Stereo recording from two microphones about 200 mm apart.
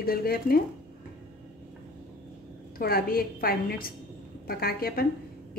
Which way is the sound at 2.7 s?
50° left (ahead or behind).